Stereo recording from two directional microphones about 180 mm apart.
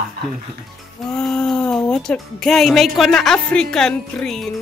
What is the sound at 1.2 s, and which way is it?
Speech, 5° left (ahead or behind).